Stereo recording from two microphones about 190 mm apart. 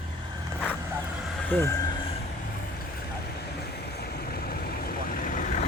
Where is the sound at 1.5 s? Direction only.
10° left (ahead or behind).